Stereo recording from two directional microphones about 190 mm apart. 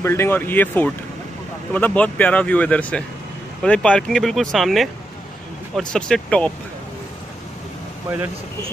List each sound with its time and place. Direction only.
0.0 s speech: 15° left (ahead or behind)